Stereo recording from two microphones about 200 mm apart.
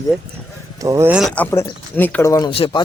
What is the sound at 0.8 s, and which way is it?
Speech, 15° right (ahead or behind).